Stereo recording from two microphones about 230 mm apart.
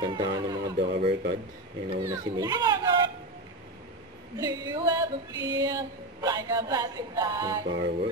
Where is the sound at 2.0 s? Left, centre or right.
Centre.